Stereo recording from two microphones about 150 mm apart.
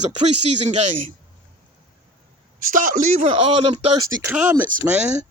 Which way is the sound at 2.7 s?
60° right (ahead or behind).